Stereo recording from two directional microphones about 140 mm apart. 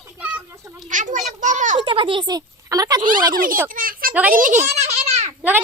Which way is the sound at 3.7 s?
85° right.